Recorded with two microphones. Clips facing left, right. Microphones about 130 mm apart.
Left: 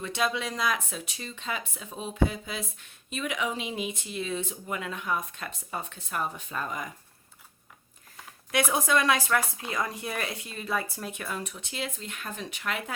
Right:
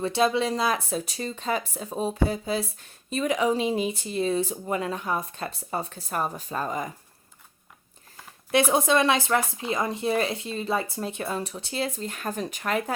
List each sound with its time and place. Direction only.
0.0 s speech: 30° right (ahead or behind)
8.5 s speech: 25° right (ahead or behind)